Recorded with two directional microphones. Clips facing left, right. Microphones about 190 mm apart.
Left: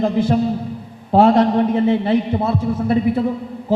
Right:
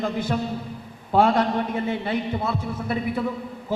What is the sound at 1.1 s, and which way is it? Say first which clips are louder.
A man's voice: left 7 dB; 35° left (ahead or behind).